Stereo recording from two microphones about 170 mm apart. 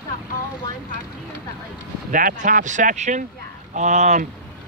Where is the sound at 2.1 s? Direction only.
50° right (ahead or behind).